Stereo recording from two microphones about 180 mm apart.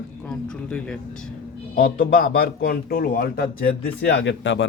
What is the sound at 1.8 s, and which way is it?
A man's voice, 55° left (ahead or behind).